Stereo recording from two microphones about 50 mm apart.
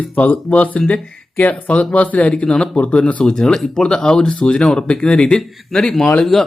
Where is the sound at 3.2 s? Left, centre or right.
Centre.